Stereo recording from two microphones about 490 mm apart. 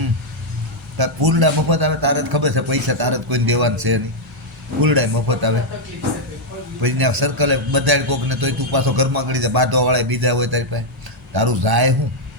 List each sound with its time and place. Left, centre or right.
0.9 s a man's voice: right
6.8 s a man's voice: right